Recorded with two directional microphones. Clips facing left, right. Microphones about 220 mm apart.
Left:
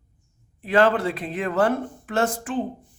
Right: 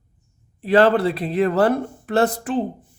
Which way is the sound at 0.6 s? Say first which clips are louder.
Right 4 dB; 35° right (ahead or behind).